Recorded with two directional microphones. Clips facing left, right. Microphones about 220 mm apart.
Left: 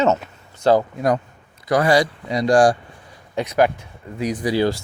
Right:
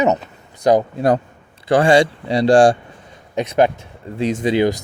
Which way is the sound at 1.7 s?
25° right (ahead or behind).